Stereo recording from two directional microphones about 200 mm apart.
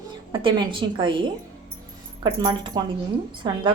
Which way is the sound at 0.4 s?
25° right (ahead or behind).